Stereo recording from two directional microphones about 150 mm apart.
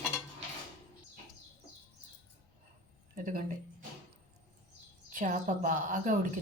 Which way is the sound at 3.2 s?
65° right (ahead or behind).